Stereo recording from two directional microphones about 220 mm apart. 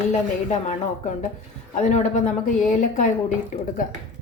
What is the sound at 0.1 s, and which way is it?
A woman's voice, 30° left (ahead or behind).